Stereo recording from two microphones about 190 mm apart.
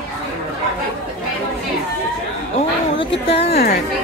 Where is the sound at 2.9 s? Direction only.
30° left (ahead or behind).